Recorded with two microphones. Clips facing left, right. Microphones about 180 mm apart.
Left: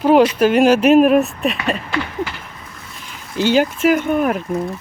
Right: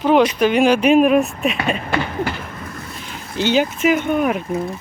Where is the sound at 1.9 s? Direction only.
55° right (ahead or behind).